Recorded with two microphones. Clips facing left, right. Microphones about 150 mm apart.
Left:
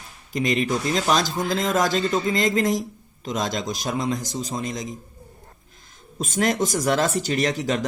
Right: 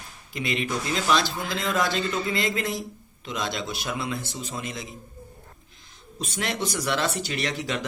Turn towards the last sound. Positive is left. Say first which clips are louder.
# left 6 dB
turn(degrees=40)  # may be behind; listen again after turning